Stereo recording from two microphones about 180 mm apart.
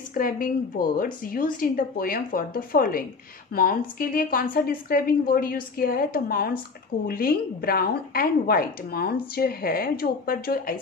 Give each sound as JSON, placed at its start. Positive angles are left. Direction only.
{"t": 0.1, "sound": "a woman's voice", "side_deg": 50}